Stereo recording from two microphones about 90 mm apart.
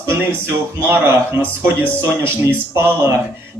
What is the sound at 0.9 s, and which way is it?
Speech, 25° right (ahead or behind).